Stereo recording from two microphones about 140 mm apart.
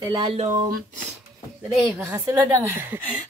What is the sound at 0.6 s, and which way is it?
Speech, 75° right (ahead or behind).